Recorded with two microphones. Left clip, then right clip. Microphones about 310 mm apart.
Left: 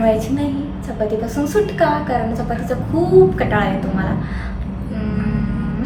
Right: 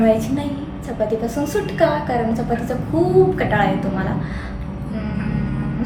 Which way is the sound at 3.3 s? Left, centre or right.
Centre.